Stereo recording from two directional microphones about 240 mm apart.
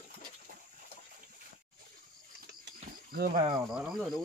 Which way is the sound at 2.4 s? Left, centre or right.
Right.